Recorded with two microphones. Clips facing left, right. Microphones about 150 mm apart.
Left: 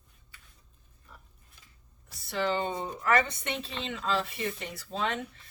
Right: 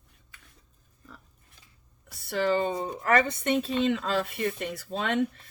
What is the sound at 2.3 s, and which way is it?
Speech, 45° right (ahead or behind).